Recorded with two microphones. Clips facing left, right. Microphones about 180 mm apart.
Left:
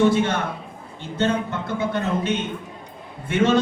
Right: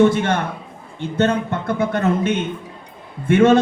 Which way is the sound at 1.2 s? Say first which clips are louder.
Right 4 dB; 55° right (ahead or behind).